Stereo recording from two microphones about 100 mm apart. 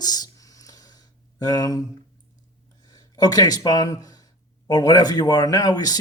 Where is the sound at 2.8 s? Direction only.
40° left (ahead or behind).